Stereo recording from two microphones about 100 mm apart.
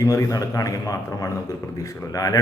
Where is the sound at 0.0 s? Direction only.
35° left (ahead or behind).